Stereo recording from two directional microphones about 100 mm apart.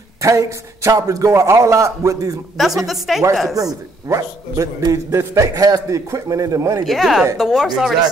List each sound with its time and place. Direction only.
0.2 s a man's voice: 30° right (ahead or behind)
2.5 s a woman's voice: centre (ahead or behind)
3.5 s a man's voice: 35° right (ahead or behind)
6.9 s a woman's voice: 5° right (ahead or behind)